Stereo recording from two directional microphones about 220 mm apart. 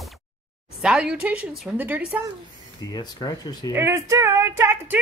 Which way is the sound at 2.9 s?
20° left (ahead or behind).